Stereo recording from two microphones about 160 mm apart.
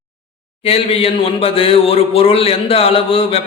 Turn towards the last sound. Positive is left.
turn(degrees=35)  # may be behind; listen again after turning